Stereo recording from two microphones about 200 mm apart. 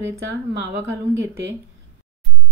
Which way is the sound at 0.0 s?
15° right (ahead or behind).